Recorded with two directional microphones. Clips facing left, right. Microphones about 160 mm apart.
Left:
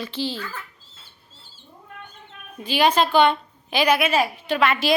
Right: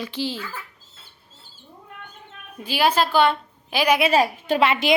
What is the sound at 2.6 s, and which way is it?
A woman's voice, 5° right (ahead or behind).